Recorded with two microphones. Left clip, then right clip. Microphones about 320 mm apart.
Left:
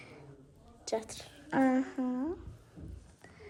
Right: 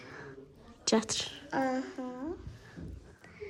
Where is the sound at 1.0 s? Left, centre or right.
Right.